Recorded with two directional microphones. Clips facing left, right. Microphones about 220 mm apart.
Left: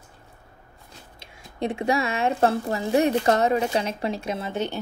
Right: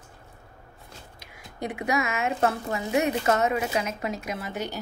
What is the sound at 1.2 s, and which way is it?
Speech, 25° left (ahead or behind).